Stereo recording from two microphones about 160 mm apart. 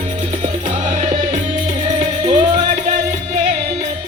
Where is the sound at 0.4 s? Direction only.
50° right (ahead or behind).